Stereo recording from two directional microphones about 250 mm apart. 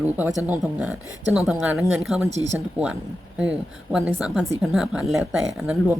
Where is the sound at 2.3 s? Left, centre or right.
Right.